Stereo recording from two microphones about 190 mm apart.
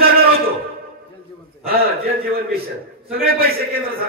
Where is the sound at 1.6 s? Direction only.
50° right (ahead or behind).